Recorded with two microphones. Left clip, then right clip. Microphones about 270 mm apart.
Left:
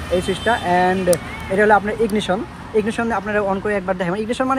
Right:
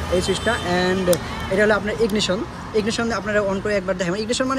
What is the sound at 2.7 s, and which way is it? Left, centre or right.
Speech, centre.